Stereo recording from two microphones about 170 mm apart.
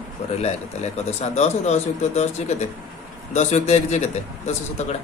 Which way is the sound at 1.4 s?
40° left (ahead or behind).